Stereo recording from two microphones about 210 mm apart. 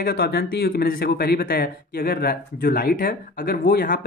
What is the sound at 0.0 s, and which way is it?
Speech, 45° left (ahead or behind).